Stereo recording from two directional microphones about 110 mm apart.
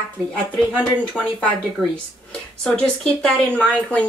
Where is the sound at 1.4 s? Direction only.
10° left (ahead or behind).